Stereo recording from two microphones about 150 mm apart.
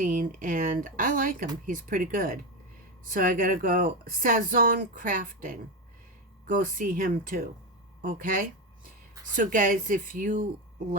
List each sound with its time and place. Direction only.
0.0 s speech: 65° right (ahead or behind)